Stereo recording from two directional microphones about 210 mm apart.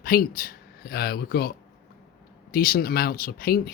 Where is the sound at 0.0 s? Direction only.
45° left (ahead or behind).